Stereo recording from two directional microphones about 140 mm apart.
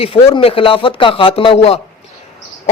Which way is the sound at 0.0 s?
40° left (ahead or behind).